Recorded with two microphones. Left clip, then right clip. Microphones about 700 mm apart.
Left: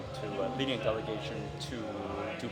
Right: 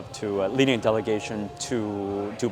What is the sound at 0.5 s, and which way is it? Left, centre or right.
Speech, right.